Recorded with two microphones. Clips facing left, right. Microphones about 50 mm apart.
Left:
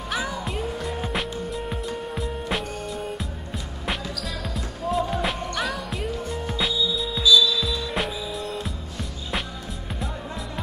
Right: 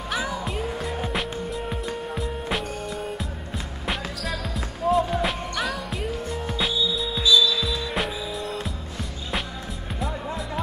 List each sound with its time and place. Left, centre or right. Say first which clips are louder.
0.1 s music: even; centre
3.8 s basketball bounce: even; centre
7.6 s music: even; centre